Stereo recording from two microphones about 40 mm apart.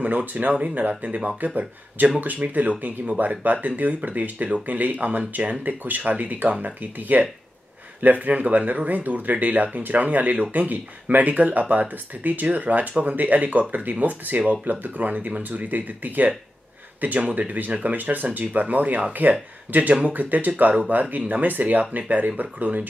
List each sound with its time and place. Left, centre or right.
0.0 s speech: right